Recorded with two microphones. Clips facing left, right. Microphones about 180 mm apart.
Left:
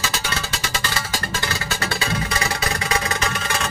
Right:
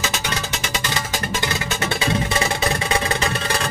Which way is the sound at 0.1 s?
20° right (ahead or behind).